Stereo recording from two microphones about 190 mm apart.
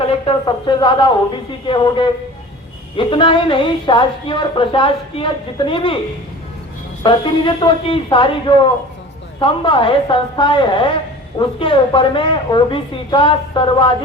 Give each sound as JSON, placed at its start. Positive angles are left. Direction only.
{"t": 0.0, "sound": "a woman's voice", "side_deg": 25}
{"t": 7.0, "sound": "a woman's voice", "side_deg": 25}